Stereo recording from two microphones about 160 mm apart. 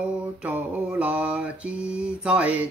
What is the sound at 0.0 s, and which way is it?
Mantra, 10° right (ahead or behind).